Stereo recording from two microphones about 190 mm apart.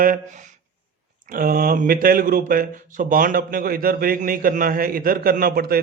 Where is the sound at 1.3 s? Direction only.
50° right (ahead or behind).